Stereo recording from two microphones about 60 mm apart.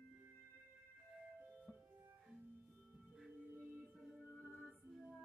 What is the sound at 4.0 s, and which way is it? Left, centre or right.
Music, centre.